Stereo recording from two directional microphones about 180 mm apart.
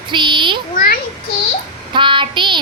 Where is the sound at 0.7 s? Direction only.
50° left (ahead or behind).